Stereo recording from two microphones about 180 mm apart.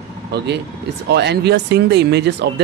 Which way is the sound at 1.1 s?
70° right (ahead or behind).